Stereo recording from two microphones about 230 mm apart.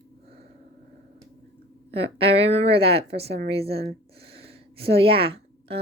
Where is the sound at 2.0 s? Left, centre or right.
Right.